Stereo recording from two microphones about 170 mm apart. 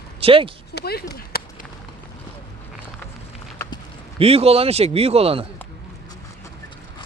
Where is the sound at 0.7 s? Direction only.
70° left (ahead or behind).